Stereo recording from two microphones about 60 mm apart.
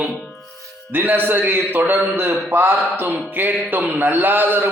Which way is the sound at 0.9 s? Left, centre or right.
Right.